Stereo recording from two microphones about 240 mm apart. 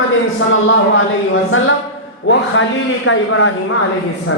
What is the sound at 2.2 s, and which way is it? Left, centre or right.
Speech, left.